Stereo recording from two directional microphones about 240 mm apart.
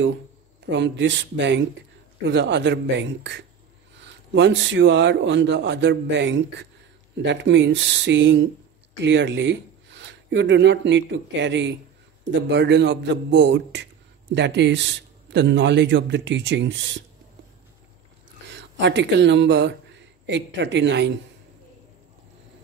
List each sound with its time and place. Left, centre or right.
0.7 s a man's voice: right
18.5 s speech: right